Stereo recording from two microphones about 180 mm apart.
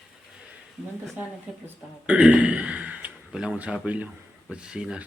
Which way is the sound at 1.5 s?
5° right (ahead or behind).